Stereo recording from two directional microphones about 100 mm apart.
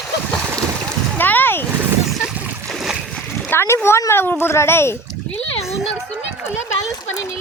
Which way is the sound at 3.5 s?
25° left (ahead or behind).